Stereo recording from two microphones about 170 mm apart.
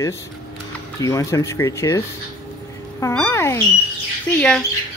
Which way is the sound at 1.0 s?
20° left (ahead or behind).